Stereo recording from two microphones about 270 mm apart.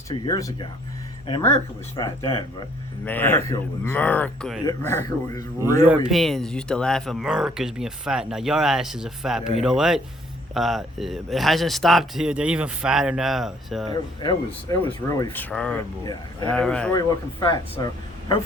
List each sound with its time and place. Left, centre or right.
0.3 s speech: centre
5.8 s speech: centre
13.9 s speech: centre
17.4 s speech: centre